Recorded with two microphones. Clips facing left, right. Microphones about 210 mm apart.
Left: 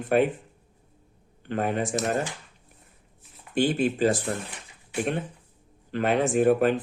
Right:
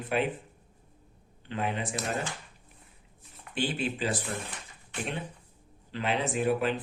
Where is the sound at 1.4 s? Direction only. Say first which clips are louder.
Left 6 dB; 50° left (ahead or behind).